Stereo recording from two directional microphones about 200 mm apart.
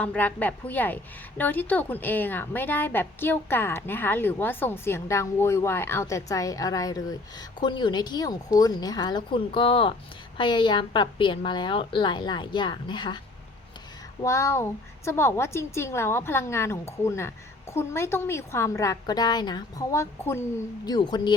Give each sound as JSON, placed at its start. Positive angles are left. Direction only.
{"t": 0.0, "sound": "a woman's voice", "side_deg": 5}
{"t": 14.2, "sound": "a woman's voice", "side_deg": 15}